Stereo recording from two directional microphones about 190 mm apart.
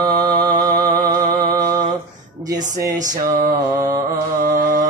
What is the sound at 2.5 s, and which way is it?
Music, 20° right (ahead or behind).